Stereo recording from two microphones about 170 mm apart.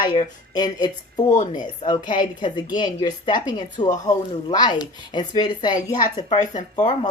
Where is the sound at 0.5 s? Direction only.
25° left (ahead or behind).